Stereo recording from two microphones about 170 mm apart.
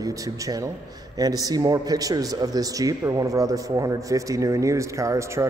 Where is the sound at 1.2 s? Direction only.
20° right (ahead or behind).